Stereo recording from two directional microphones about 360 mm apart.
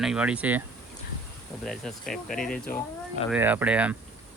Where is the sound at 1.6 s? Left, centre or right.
Centre.